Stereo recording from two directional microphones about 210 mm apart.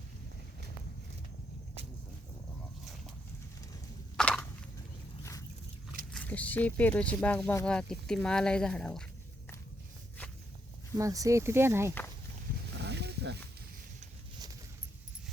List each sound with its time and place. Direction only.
4.2 s a sound: 5° left (ahead or behind)
6.1 s speech: 5° left (ahead or behind)
10.9 s speech: 15° right (ahead or behind)
12.8 s wild animals: 55° right (ahead or behind)